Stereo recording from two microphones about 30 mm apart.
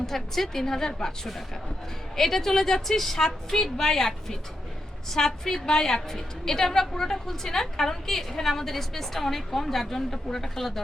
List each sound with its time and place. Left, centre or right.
0.0 s a woman's voice: centre